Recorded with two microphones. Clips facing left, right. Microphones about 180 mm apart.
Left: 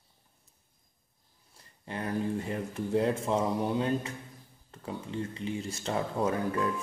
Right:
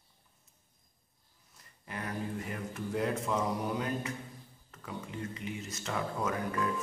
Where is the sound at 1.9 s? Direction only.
30° left (ahead or behind).